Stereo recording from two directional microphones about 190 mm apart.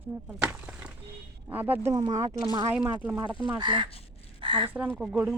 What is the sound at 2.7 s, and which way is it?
Speech, 5° right (ahead or behind).